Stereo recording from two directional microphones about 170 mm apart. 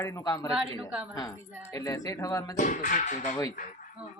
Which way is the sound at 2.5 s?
45° left (ahead or behind).